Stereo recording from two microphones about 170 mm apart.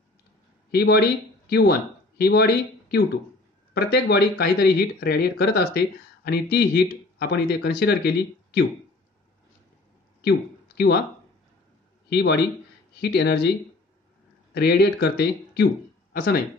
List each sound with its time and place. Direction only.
0.7 s speech: 70° left (ahead or behind)
10.2 s speech: 70° left (ahead or behind)
12.1 s speech: 75° left (ahead or behind)
14.5 s speech: 70° left (ahead or behind)